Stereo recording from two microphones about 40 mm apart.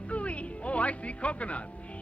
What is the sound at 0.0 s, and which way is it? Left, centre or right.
Music, left.